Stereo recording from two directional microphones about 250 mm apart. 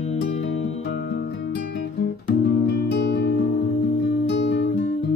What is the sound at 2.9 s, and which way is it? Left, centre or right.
Music, left.